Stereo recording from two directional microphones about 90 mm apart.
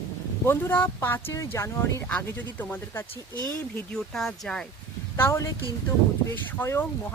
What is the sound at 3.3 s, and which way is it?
Speech, 50° right (ahead or behind).